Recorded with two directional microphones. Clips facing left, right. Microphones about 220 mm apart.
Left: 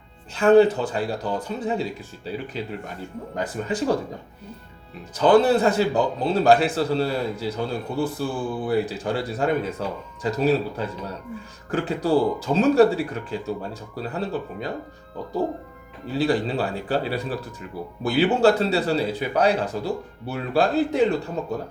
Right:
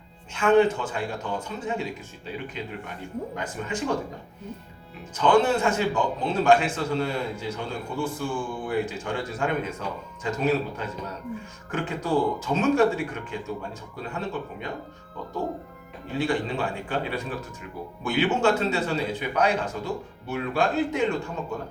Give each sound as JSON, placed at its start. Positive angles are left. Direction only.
{"t": 0.3, "sound": "speech", "side_deg": 35}
{"t": 5.1, "sound": "speech", "side_deg": 35}
{"t": 16.1, "sound": "speech", "side_deg": 35}